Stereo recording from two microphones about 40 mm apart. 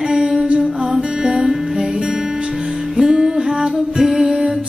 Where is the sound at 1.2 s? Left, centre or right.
Centre.